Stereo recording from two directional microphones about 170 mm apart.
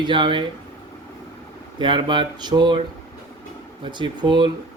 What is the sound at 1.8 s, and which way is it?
Speech, 30° right (ahead or behind).